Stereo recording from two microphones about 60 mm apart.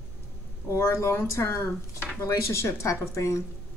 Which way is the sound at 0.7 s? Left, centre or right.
Left.